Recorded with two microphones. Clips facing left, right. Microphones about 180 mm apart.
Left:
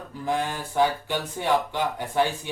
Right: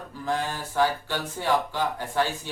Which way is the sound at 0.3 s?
15° left (ahead or behind).